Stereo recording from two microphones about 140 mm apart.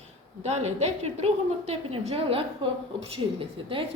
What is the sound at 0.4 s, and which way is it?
A woman's voice, 50° right (ahead or behind).